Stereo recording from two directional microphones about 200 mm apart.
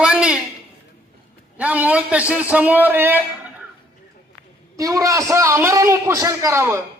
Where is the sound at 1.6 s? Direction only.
5° right (ahead or behind).